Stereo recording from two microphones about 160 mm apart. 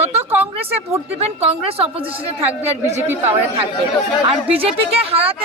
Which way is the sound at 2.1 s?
10° right (ahead or behind).